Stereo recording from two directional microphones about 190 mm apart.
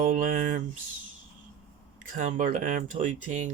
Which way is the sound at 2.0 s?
45° right (ahead or behind).